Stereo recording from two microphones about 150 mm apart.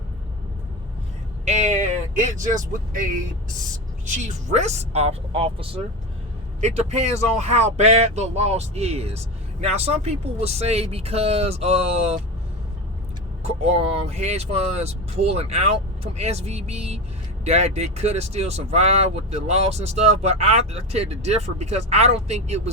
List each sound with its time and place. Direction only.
1.5 s speech: 50° right (ahead or behind)
6.6 s speech: 50° right (ahead or behind)
13.4 s speech: 45° right (ahead or behind)